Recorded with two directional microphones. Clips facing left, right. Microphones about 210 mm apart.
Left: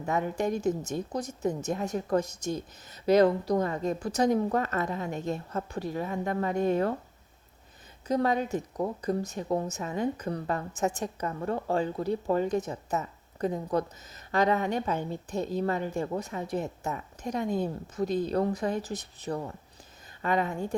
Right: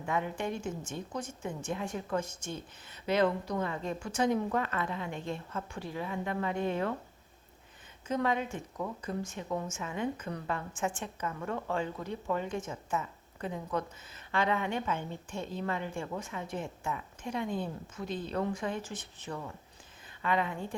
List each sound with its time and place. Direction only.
0.0 s a woman's voice: 40° left (ahead or behind)
8.0 s a woman's voice: 35° left (ahead or behind)